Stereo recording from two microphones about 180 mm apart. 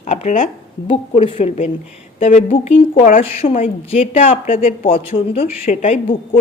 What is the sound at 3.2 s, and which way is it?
A woman's voice, 35° left (ahead or behind).